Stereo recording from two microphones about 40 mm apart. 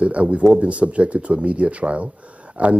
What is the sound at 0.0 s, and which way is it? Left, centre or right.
Speech, right.